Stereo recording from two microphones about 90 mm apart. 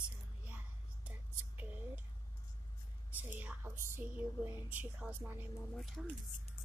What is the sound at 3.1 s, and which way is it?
A woman's voice, 20° right (ahead or behind).